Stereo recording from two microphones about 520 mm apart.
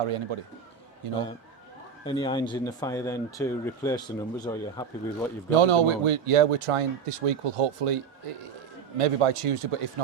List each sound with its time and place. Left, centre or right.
0.0 s speech: right
2.0 s speech: centre
5.6 s speech: right
9.0 s speech: right